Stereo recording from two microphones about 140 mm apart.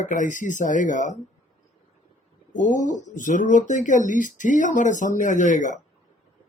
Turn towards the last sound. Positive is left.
turn(degrees=60)  # may be behind; listen again after turning